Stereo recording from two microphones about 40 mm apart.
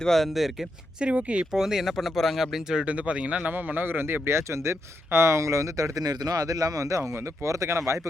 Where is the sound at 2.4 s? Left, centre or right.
Centre.